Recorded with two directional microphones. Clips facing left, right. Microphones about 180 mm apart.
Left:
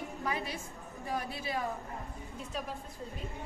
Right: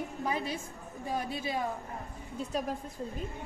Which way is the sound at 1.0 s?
20° right (ahead or behind).